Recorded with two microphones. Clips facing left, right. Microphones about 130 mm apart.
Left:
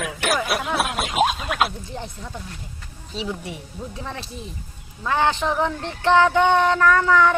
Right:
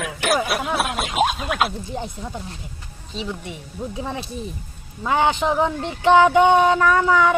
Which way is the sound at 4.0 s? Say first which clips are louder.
Right 6 dB; 15° right (ahead or behind).